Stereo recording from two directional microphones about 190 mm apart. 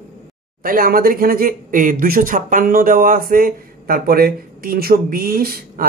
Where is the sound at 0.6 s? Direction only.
50° right (ahead or behind).